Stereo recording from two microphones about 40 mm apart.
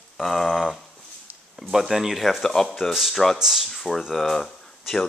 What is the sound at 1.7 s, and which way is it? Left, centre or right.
Speech, centre.